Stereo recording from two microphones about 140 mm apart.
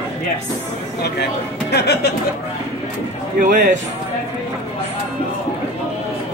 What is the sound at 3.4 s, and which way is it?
Speech, 75° right (ahead or behind).